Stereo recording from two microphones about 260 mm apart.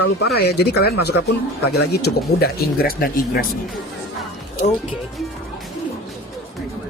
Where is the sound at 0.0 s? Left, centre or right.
Left.